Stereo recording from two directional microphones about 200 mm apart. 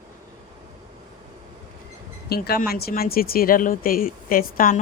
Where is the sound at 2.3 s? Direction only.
50° left (ahead or behind).